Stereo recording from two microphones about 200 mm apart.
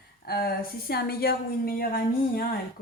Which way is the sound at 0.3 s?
50° left (ahead or behind).